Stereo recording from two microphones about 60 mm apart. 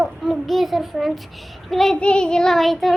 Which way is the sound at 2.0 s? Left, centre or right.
Centre.